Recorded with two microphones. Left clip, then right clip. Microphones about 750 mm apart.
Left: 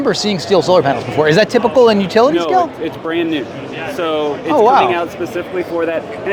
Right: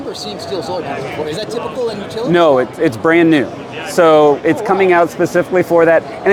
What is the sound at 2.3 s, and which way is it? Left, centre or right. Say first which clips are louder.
Speech: right 3 dB; right.